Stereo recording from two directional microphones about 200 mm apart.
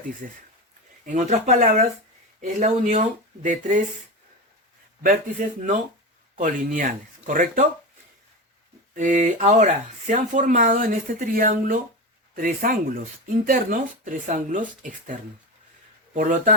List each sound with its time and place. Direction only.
1.0 s speech: 35° right (ahead or behind)
5.0 s speech: 40° right (ahead or behind)
9.0 s speech: 40° right (ahead or behind)